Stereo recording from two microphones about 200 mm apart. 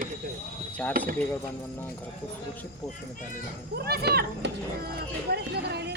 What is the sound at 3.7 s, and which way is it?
Speech, 50° right (ahead or behind).